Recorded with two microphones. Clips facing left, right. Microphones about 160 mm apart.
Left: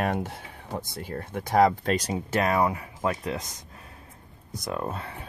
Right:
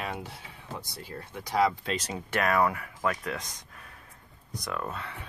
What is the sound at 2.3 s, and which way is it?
Speech, 25° left (ahead or behind).